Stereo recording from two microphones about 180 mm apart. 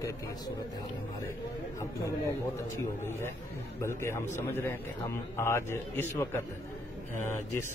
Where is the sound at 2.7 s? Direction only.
15° left (ahead or behind).